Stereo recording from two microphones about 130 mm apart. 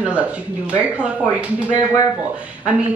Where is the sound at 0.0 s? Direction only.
10° right (ahead or behind).